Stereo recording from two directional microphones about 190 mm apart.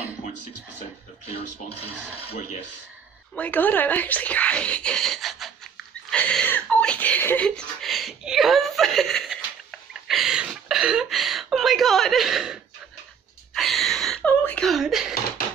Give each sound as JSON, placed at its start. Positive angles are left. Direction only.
{"t": 1.2, "sound": "speech", "side_deg": 30}
{"t": 3.3, "sound": "speech", "side_deg": 10}
{"t": 13.6, "sound": "a sound", "side_deg": 0}
{"t": 14.3, "sound": "speech", "side_deg": 10}